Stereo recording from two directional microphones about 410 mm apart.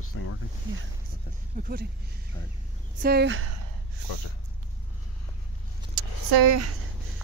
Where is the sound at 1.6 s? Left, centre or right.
Right.